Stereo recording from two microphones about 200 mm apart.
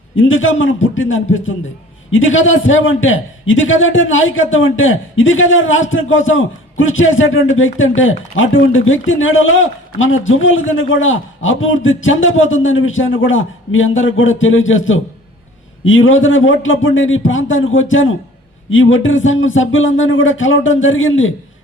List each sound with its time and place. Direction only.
0.2 s a man's voice: 75° left (ahead or behind)